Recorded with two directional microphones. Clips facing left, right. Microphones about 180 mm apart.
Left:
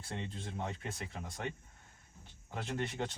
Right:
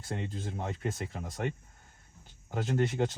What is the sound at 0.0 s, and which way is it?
Speech, 40° right (ahead or behind).